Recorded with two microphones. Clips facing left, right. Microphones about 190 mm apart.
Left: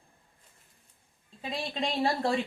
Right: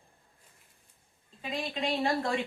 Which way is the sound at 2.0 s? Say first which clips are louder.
Left 3 dB; 35° left (ahead or behind).